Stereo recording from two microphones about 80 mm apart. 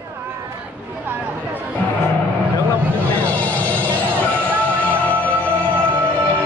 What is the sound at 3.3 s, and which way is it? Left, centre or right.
Music, centre.